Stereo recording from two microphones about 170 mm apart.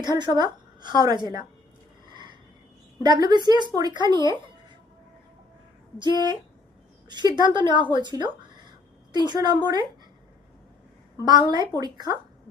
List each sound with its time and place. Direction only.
0.0 s a woman's voice: 25° right (ahead or behind)
3.0 s a woman's voice: 25° right (ahead or behind)
6.0 s a woman's voice: 25° right (ahead or behind)
11.2 s a woman's voice: 25° right (ahead or behind)